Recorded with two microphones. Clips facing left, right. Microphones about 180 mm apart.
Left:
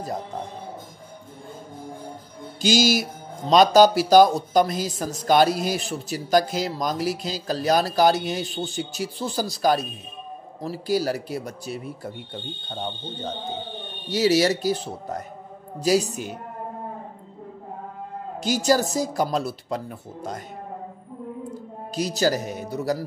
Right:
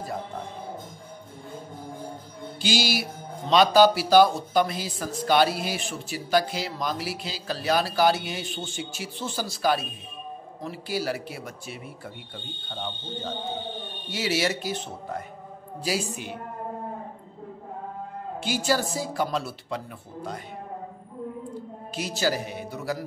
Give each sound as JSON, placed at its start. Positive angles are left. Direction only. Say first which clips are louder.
{"t": 2.6, "sound": "speech", "louder": "left 6 dB", "side_deg": 45}
{"t": 18.4, "sound": "speech", "louder": "left 5 dB", "side_deg": 40}
{"t": 21.9, "sound": "speech", "louder": "left 4 dB", "side_deg": 40}